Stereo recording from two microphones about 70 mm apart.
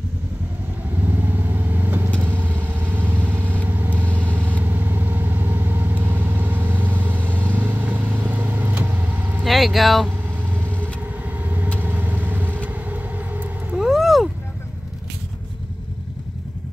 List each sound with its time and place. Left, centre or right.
1.0 s vehicle: right
9.4 s vehicle: centre
10.0 s vehicle: right
13.7 s vehicle: centre